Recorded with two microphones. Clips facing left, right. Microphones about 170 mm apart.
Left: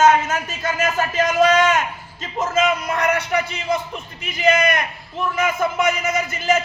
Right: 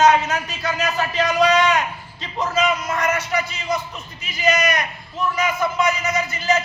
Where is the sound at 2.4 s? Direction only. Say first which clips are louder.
Left 1 dB; 50° left (ahead or behind).